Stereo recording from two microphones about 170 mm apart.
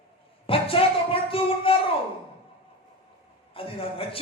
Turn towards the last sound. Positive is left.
turn(degrees=30)  # may be behind; listen again after turning